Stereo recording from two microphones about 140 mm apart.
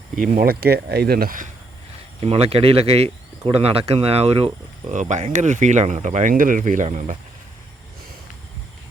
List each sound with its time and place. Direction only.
0.2 s speech: 85° right
2.2 s speech: 45° right (ahead or behind)
4.9 s speech: 60° right (ahead or behind)